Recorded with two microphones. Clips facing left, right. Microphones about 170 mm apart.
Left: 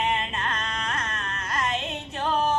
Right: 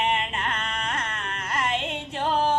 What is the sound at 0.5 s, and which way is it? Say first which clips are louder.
Music: right 1 dB; 30° right (ahead or behind).